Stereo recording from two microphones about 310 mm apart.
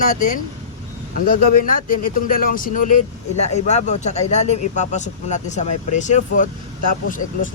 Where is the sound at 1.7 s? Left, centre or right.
Left.